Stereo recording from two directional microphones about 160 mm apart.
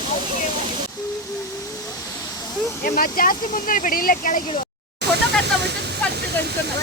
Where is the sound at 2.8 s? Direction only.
65° left (ahead or behind).